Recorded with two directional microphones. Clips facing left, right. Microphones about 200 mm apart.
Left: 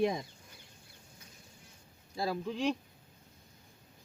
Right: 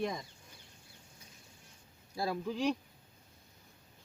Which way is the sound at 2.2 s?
Centre (ahead or behind).